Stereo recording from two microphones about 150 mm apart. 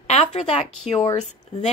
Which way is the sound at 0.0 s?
50° left (ahead or behind).